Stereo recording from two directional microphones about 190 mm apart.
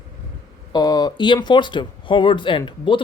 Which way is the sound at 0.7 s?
20° left (ahead or behind).